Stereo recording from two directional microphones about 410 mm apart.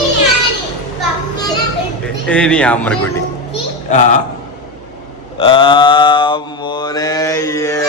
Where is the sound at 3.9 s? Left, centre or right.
Centre.